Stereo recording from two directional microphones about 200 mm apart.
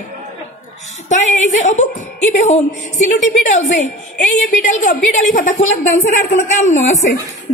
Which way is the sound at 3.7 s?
40° left (ahead or behind).